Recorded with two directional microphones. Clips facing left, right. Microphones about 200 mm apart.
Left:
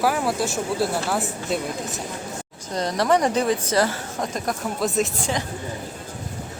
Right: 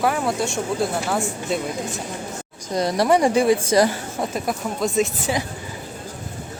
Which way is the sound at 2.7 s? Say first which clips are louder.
Right 2 dB; 10° right (ahead or behind).